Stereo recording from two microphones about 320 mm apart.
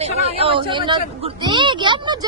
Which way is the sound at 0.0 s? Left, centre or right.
Centre.